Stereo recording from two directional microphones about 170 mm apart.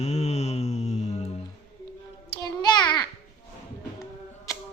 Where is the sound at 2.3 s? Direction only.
25° left (ahead or behind).